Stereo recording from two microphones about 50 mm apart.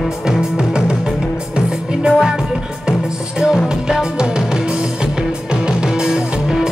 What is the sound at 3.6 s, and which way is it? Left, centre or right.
Music, centre.